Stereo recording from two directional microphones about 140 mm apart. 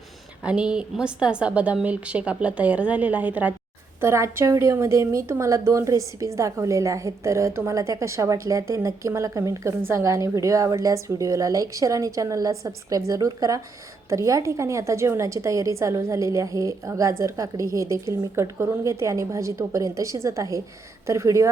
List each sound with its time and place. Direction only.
0.4 s a woman's voice: 5° right (ahead or behind)